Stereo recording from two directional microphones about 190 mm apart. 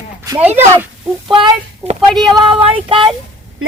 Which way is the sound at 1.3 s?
30° right (ahead or behind).